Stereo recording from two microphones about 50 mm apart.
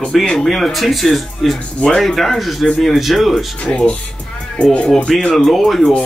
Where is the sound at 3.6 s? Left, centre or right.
Centre.